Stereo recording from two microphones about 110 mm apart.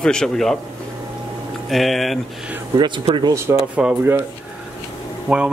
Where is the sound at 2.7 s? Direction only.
45° right (ahead or behind).